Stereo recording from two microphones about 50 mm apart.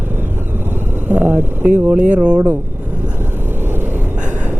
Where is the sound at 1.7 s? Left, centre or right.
Right.